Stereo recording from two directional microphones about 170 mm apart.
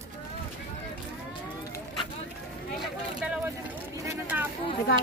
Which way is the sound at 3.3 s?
10° right (ahead or behind).